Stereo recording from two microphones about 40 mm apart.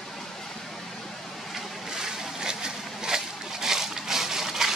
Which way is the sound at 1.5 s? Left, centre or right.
Centre.